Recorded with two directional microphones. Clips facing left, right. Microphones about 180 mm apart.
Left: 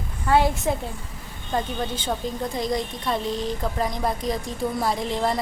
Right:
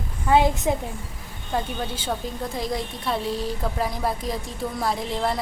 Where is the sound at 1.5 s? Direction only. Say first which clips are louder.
Left 1 dB; 5° right (ahead or behind).